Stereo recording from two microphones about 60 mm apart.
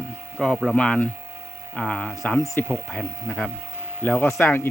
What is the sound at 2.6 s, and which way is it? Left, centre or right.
Speech, left.